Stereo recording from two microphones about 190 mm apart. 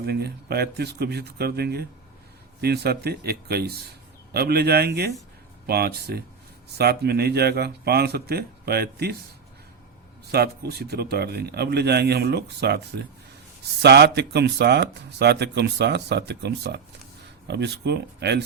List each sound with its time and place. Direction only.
0.0 s speech: 55° right (ahead or behind)
10.3 s speech: 55° right (ahead or behind)
13.8 s speech: 60° right (ahead or behind)